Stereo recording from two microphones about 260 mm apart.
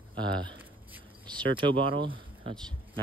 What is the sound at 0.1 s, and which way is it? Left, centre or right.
Speech, centre.